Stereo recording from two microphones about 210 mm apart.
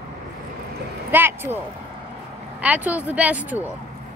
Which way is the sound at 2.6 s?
5° right (ahead or behind).